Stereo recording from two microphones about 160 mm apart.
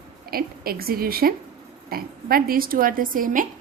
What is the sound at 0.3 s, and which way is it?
A woman's voice, 70° right (ahead or behind).